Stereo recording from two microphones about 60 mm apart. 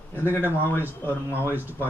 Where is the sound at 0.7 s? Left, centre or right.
Left.